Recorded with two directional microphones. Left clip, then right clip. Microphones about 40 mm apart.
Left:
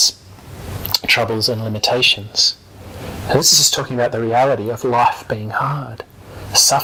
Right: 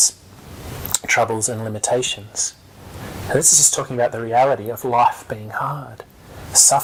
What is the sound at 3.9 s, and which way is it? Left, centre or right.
Speech, right.